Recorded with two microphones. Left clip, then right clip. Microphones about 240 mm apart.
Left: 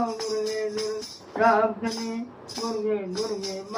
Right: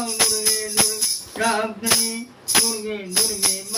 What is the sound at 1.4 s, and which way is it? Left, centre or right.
Music, right.